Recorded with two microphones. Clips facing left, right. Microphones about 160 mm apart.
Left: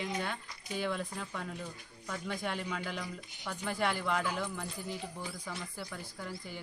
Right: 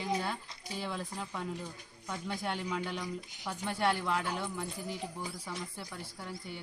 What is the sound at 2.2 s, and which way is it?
Speech, centre (ahead or behind).